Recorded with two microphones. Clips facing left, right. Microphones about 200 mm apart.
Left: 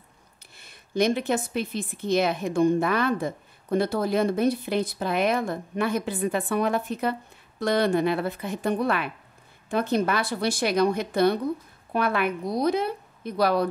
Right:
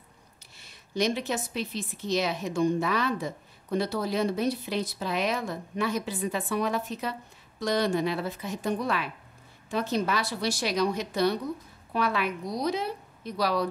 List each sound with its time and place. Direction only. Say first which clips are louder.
0.6 s speech: left 4 dB; 55° left (ahead or behind)